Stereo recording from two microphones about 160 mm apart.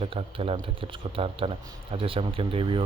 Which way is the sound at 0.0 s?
35° right (ahead or behind).